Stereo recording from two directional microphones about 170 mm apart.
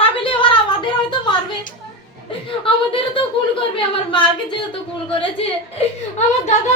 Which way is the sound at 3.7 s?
30° left (ahead or behind).